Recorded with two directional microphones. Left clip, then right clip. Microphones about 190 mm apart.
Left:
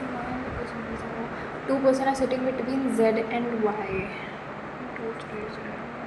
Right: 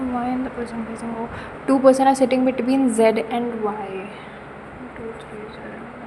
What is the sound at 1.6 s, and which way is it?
A woman's voice, 40° right (ahead or behind).